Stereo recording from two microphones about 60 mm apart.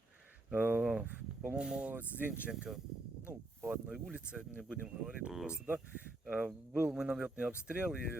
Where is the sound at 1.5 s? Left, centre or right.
Centre.